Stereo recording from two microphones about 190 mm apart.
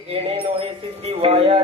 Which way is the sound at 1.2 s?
30° right (ahead or behind).